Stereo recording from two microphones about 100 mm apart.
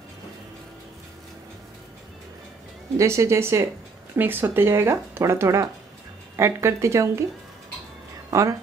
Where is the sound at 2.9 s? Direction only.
30° right (ahead or behind).